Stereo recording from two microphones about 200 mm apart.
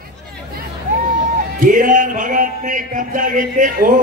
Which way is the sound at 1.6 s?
40° right (ahead or behind).